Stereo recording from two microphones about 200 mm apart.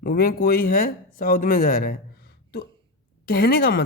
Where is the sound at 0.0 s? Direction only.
45° left (ahead or behind).